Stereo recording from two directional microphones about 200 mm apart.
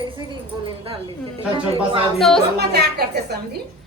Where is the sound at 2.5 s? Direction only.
55° right (ahead or behind).